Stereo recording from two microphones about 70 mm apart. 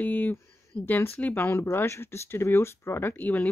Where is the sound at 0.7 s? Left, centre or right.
Left.